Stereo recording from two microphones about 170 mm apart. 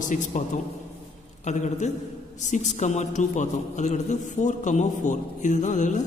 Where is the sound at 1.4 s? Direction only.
45° left (ahead or behind).